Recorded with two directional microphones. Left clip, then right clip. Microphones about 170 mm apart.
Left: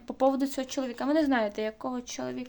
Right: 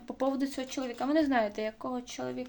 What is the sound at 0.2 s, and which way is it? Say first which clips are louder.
Speech: left 6 dB; 35° left (ahead or behind).